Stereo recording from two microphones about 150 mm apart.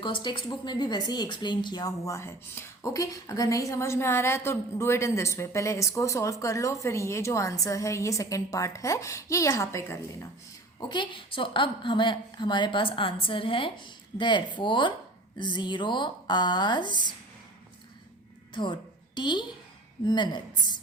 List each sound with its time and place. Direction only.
0.0 s speech: 30° left (ahead or behind)
10.8 s a woman's voice: 30° left (ahead or behind)
18.5 s a woman's voice: 30° left (ahead or behind)